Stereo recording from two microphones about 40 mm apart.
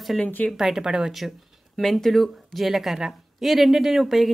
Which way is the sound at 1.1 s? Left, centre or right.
Centre.